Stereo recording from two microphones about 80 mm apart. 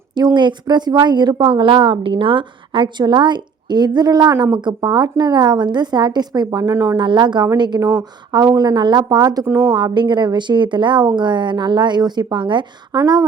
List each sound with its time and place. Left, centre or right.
0.1 s a woman's voice: right
3.0 s speech: right
6.9 s a woman's voice: right
9.5 s speech: right
9.7 s a woman's voice: right
13.0 s speech: right